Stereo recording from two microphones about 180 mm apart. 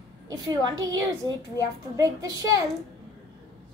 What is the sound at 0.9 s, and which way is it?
A child's voice, 20° right (ahead or behind).